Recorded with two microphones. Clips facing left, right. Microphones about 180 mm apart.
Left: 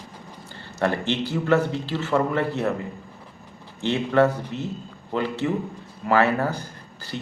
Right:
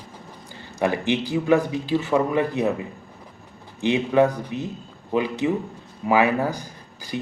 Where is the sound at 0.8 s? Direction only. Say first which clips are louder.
Right 1 dB; 15° right (ahead or behind).